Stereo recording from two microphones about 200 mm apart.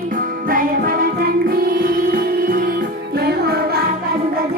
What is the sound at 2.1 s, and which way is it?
Music, 45° right (ahead or behind).